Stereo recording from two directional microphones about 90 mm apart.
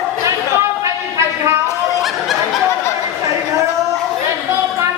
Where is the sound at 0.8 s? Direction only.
35° right (ahead or behind).